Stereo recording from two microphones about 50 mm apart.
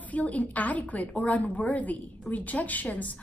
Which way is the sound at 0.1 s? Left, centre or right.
Left.